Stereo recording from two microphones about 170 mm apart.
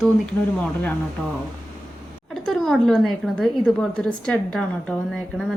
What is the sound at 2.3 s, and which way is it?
A woman's voice, centre (ahead or behind).